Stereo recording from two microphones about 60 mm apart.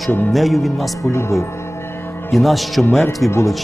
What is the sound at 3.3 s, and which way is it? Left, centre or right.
Speech, left.